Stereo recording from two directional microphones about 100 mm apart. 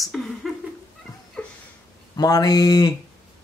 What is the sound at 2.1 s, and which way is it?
Mantra, 40° left (ahead or behind).